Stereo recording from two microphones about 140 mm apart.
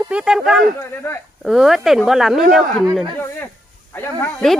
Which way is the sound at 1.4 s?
Centre (ahead or behind).